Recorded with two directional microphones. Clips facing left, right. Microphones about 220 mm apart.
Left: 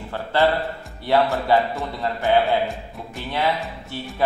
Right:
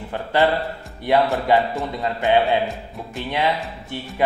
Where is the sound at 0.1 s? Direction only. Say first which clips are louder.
Right 1 dB; 15° right (ahead or behind).